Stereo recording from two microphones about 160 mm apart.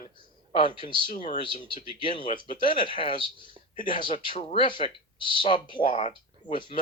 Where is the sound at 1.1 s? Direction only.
50° left (ahead or behind).